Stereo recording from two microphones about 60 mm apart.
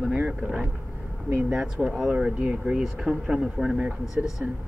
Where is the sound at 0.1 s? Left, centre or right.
Right.